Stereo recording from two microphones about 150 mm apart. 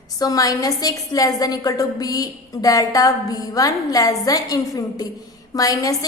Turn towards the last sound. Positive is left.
turn(degrees=25)  # may be behind; listen again after turning